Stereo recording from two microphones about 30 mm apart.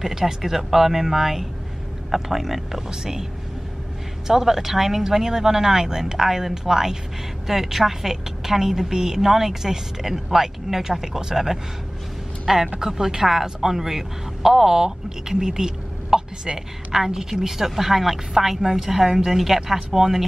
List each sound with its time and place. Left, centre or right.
0.0 s a woman's voice: centre
2.9 s speech: right
4.3 s a woman's voice: centre